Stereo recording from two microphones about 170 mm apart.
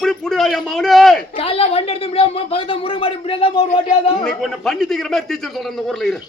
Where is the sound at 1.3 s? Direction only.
35° left (ahead or behind).